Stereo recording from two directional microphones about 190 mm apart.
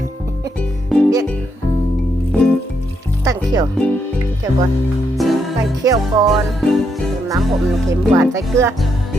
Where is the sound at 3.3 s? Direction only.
20° right (ahead or behind).